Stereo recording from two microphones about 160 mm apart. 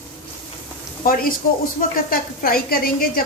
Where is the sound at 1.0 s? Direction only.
65° left (ahead or behind).